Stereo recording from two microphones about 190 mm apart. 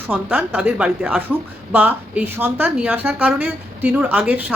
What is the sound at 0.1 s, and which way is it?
A woman's voice, 5° right (ahead or behind).